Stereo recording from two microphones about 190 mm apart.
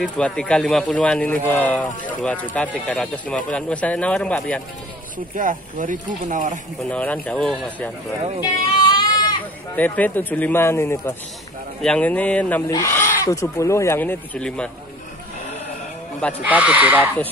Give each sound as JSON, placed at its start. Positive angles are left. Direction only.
{"t": 0.0, "sound": "speech", "side_deg": 5}
{"t": 5.3, "sound": "speech", "side_deg": -45}
{"t": 6.9, "sound": "speech", "side_deg": 10}
{"t": 8.4, "sound": "goat", "side_deg": 25}
{"t": 9.8, "sound": "speech", "side_deg": 10}
{"t": 16.3, "sound": "speech", "side_deg": -10}